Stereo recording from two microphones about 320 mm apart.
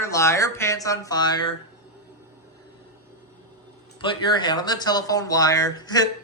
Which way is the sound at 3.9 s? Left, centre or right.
Centre.